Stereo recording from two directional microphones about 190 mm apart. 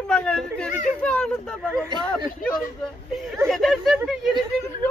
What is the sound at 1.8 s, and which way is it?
Speech, 25° right (ahead or behind).